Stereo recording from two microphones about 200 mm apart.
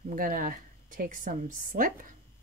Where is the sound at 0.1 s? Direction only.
45° right (ahead or behind).